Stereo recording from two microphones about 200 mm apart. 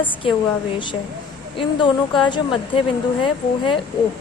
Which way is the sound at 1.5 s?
25° left (ahead or behind).